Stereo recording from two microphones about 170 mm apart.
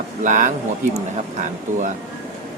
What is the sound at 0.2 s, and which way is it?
Speech, 50° right (ahead or behind).